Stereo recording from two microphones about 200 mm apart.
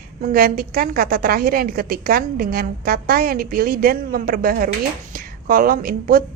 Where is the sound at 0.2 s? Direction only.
45° right (ahead or behind).